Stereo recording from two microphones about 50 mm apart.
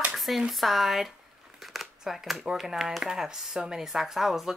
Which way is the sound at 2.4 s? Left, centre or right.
Centre.